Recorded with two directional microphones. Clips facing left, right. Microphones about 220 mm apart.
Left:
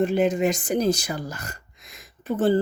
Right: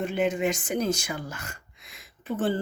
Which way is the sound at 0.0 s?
40° left (ahead or behind).